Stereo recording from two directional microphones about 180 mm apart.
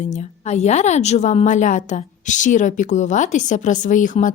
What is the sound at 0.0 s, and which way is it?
A woman's voice, 40° left (ahead or behind).